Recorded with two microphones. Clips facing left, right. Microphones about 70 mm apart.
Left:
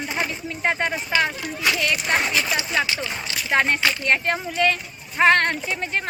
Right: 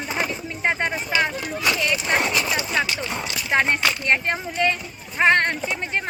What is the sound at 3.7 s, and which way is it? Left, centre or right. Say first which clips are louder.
Speech: even; centre.